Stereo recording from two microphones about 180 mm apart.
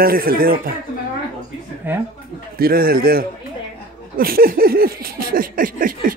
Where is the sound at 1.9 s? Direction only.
10° right (ahead or behind).